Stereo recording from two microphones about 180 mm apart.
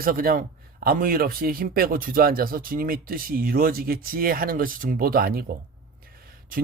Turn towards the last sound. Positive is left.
turn(degrees=-55)  # may be behind; listen again after turning